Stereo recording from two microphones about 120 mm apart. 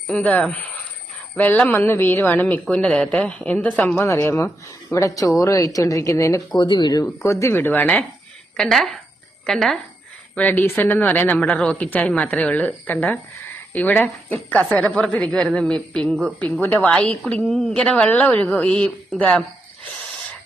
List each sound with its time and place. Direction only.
0.1 s a woman's voice: 10° left (ahead or behind)
6.6 s speech: 40° left (ahead or behind)
7.0 s speech: 25° left (ahead or behind)
8.5 s a woman's voice: 5° left (ahead or behind)